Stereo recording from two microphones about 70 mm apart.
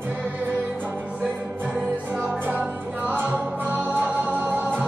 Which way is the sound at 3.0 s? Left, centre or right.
Right.